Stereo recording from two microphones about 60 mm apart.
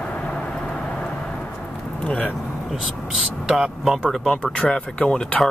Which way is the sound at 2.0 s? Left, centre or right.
Centre.